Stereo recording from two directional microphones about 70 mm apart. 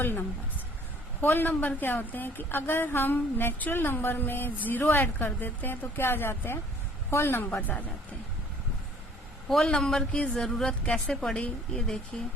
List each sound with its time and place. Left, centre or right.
0.0 s a woman's voice: left
9.5 s a woman's voice: centre